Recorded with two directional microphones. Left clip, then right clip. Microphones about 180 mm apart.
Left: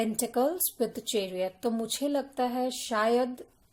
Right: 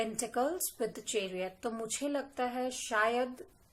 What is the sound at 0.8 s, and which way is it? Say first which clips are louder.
A woman's voice: left 5 dB; 55° left (ahead or behind).